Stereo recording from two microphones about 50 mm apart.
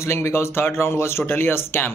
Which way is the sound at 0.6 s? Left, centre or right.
Left.